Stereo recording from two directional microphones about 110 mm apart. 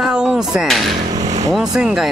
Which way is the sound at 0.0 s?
5° right (ahead or behind).